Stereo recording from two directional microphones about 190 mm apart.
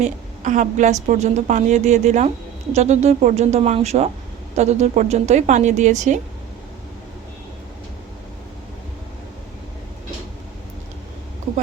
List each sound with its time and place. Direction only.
0.0 s a woman's voice: 40° right (ahead or behind)